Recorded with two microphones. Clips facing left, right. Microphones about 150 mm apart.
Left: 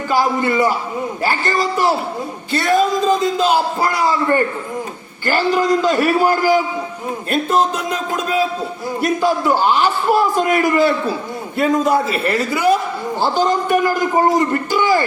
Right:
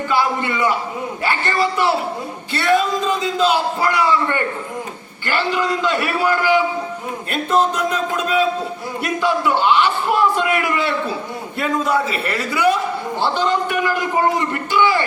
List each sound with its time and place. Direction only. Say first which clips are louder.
0.1 s a man's voice: left 4 dB; 40° left (ahead or behind)
8.1 s a man's voice: left 1 dB; 35° left (ahead or behind)